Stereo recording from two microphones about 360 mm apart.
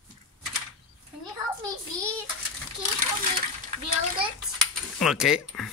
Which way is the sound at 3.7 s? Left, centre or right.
Centre.